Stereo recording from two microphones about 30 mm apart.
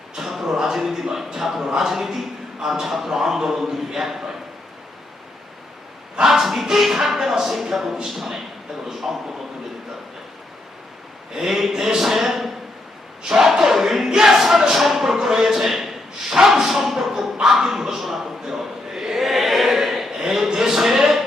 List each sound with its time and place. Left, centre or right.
0.2 s music: centre
1.1 s a man's voice: centre
6.2 s speech: centre
11.3 s speech: centre
13.6 s a sound: centre